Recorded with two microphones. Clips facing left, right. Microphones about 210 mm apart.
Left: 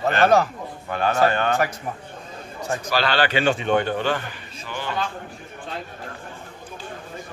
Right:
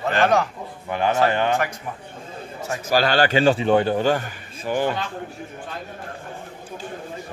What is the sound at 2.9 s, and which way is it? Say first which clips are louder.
A man's voice: right 4 dB; 45° right (ahead or behind).